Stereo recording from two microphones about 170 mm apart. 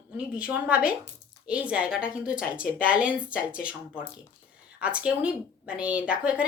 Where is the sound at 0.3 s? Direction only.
10° right (ahead or behind).